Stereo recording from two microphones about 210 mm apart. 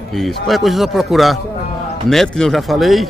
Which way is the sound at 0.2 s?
Centre (ahead or behind).